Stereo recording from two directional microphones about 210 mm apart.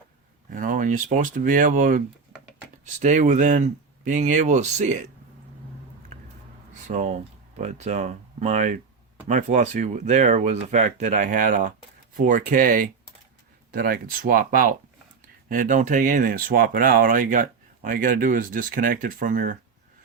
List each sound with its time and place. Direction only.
0.5 s speech: 40° right (ahead or behind)
6.8 s speech: 35° right (ahead or behind)